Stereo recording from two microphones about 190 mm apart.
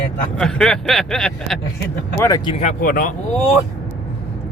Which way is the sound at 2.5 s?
40° left (ahead or behind).